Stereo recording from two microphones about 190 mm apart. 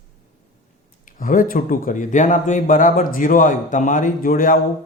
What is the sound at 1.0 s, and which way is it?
Speech, 45° left (ahead or behind).